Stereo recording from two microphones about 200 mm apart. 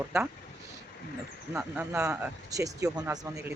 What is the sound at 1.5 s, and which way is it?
Speech, 10° right (ahead or behind).